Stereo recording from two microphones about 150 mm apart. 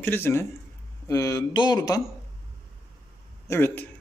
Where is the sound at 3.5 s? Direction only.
15° left (ahead or behind).